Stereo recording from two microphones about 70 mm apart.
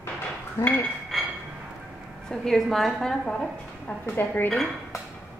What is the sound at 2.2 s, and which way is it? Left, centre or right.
A woman's voice, centre.